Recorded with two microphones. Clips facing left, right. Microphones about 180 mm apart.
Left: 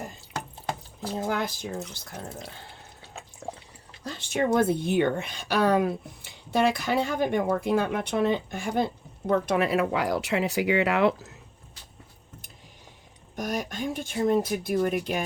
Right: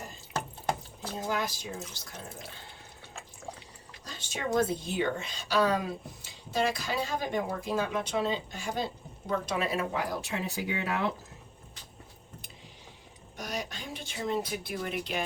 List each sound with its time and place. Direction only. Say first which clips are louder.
1.3 s speech: even; 60° left (ahead or behind)
4.4 s speech: left 6 dB; 60° left (ahead or behind); by 11.1 s 80° left
13.3 s speech: left 7 dB; 50° left (ahead or behind)